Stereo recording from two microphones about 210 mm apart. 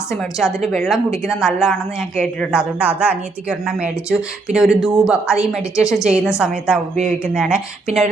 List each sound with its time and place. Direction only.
0.2 s a woman's voice: centre (ahead or behind)
6.9 s speech: 30° right (ahead or behind)
7.3 s a woman's voice: 5° right (ahead or behind)